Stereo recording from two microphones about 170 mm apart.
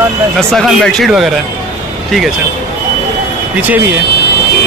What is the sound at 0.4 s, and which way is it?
Speech, centre (ahead or behind).